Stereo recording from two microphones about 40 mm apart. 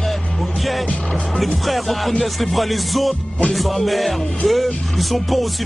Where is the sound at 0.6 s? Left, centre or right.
Centre.